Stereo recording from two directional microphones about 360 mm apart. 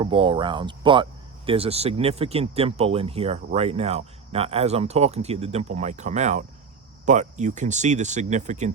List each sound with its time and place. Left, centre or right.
0.0 s speech: centre